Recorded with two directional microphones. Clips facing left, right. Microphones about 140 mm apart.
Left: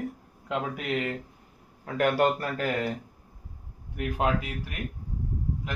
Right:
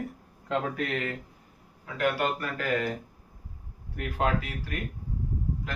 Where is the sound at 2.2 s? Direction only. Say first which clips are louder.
Left 5 dB; 35° left (ahead or behind).